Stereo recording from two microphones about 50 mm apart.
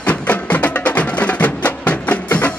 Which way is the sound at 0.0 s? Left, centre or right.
Left.